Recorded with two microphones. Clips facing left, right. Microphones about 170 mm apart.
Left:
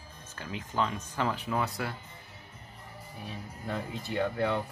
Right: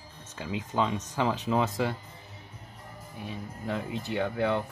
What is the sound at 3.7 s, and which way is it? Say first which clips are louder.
Speech: right 3 dB; 15° right (ahead or behind).